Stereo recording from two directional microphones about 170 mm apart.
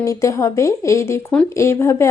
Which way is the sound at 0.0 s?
20° left (ahead or behind).